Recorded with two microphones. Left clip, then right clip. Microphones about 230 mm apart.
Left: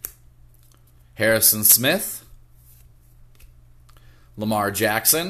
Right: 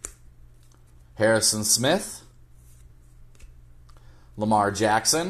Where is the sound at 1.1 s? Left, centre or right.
Left.